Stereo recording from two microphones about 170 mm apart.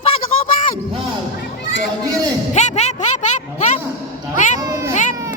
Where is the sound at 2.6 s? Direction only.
40° left (ahead or behind).